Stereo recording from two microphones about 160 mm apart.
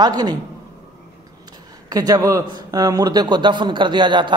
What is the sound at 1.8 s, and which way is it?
A man's voice, 25° right (ahead or behind).